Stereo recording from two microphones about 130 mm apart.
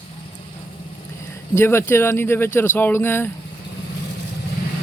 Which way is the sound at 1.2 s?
20° left (ahead or behind).